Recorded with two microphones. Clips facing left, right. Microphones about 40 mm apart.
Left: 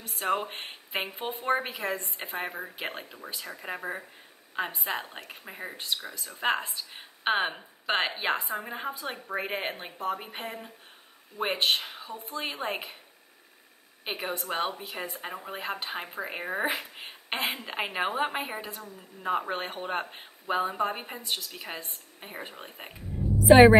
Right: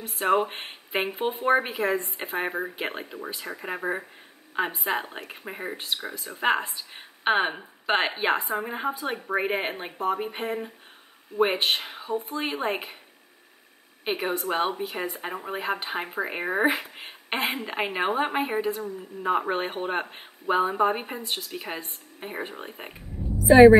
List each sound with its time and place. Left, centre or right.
0.0 s a woman's voice: centre
1.0 s a woman's voice: right
6.4 s a woman's voice: centre
14.0 s a woman's voice: centre
23.5 s a woman's voice: left